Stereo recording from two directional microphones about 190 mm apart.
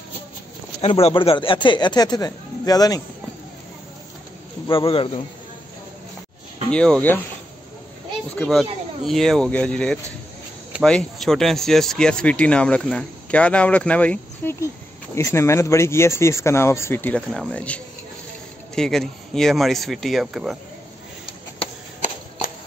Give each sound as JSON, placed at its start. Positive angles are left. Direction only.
{"t": 0.7, "sound": "speech", "side_deg": 30}
{"t": 4.7, "sound": "speech", "side_deg": 30}
{"t": 6.7, "sound": "speech", "side_deg": 5}
{"t": 8.4, "sound": "speech", "side_deg": 0}
{"t": 21.5, "sound": "a sound", "side_deg": 40}